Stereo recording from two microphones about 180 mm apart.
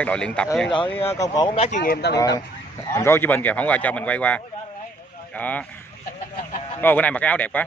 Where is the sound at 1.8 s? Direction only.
65° left (ahead or behind).